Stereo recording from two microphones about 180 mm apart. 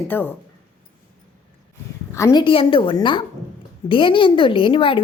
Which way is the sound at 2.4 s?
30° left (ahead or behind).